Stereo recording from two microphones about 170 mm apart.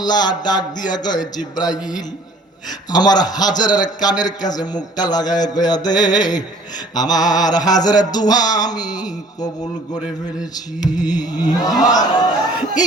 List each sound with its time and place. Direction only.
0.0 s a man's voice: 25° left (ahead or behind)
10.8 s a man's voice: 25° left (ahead or behind)